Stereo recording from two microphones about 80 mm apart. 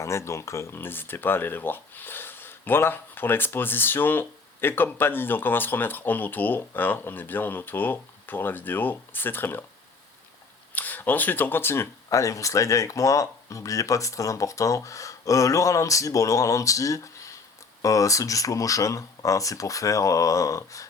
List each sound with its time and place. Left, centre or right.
0.0 s speech: left
10.8 s speech: left